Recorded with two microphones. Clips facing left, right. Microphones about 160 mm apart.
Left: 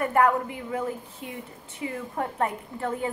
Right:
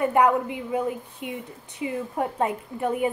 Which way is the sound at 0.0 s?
20° right (ahead or behind).